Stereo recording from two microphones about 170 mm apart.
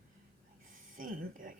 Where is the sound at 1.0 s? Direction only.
50° right (ahead or behind).